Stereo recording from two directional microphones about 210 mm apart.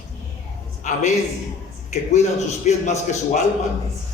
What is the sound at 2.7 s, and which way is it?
Speech, 30° left (ahead or behind).